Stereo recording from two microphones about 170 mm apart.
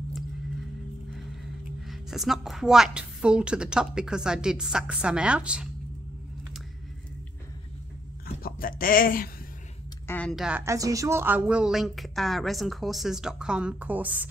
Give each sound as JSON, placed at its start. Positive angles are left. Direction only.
{"t": 1.9, "sound": "a woman's voice", "side_deg": 0}
{"t": 8.4, "sound": "a sound", "side_deg": 60}
{"t": 10.0, "sound": "speech", "side_deg": 10}
{"t": 10.3, "sound": "a woman's voice", "side_deg": -5}
{"t": 10.6, "sound": "a woman's voice", "side_deg": -20}